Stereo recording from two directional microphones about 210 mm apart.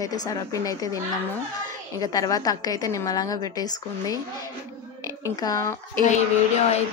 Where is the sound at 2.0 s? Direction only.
15° left (ahead or behind).